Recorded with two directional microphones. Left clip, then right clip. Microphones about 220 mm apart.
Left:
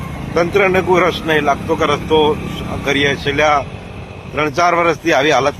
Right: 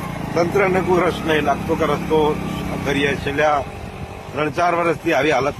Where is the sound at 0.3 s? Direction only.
35° left (ahead or behind).